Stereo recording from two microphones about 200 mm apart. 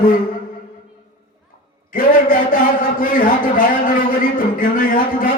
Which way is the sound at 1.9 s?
45° left (ahead or behind).